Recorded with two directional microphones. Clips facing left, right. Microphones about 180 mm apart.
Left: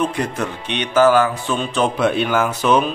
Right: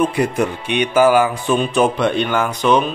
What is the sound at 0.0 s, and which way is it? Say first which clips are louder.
Speech: right 4 dB; 10° right (ahead or behind).